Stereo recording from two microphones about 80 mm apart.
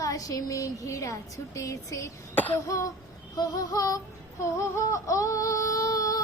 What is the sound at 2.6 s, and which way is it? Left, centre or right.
A child's voice, left.